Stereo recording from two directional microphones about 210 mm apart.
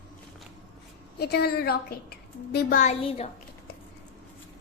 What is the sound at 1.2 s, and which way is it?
A woman's voice, 50° left (ahead or behind).